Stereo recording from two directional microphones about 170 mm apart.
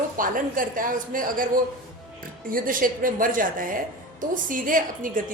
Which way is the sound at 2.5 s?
55° right (ahead or behind).